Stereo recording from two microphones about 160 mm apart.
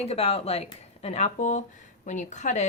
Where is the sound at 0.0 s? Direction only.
40° left (ahead or behind).